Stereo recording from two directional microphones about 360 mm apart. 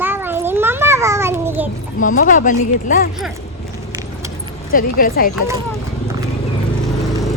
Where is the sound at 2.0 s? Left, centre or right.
Left.